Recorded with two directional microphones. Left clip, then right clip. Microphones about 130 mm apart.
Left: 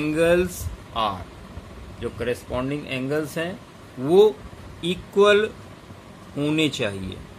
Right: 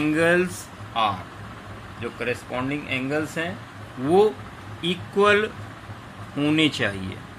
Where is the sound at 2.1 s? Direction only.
55° left (ahead or behind).